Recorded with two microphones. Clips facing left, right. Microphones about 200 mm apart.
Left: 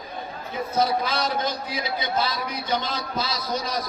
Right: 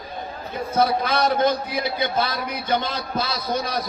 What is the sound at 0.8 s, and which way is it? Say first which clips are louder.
A man's voice: right 4 dB; 55° right (ahead or behind).